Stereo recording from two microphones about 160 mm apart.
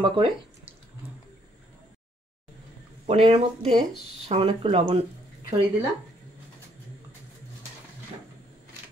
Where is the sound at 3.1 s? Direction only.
40° right (ahead or behind).